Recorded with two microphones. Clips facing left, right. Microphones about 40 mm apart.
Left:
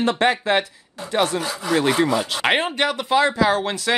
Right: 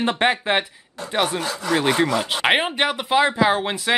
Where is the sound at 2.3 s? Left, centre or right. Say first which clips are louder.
Right 1 dB; centre.